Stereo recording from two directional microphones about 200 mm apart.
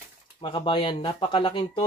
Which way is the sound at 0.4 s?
25° left (ahead or behind).